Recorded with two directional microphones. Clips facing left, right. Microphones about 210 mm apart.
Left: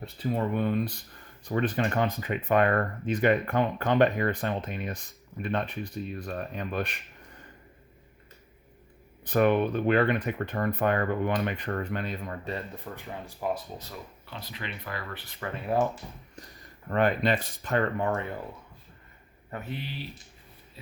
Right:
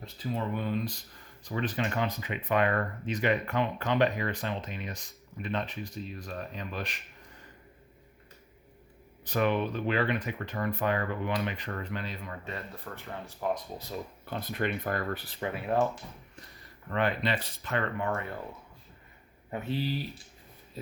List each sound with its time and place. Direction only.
0.0 s speech: 55° left (ahead or behind)
9.2 s speech: 55° left (ahead or behind)
12.7 s speech: 15° left (ahead or behind)
14.3 s speech: 50° right (ahead or behind)
15.4 s speech: 20° right (ahead or behind)
16.9 s speech: 45° left (ahead or behind)
19.7 s speech: 35° right (ahead or behind)